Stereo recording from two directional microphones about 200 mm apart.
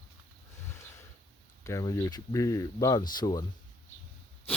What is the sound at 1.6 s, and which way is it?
Speech, 15° left (ahead or behind).